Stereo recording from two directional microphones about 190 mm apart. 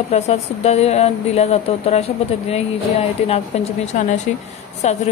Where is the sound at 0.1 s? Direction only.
35° left (ahead or behind).